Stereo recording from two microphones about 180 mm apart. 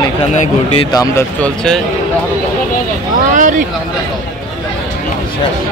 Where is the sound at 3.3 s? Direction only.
45° right (ahead or behind).